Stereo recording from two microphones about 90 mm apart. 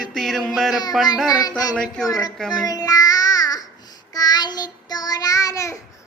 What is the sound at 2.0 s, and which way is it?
Speech, 40° left (ahead or behind).